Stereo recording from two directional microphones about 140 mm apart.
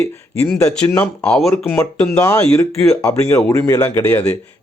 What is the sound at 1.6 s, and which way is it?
Speech, 15° left (ahead or behind).